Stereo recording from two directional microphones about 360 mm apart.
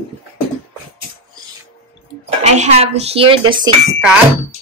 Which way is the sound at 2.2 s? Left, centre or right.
Centre.